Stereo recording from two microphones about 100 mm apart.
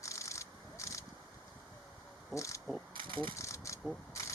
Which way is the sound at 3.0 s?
60° right (ahead or behind).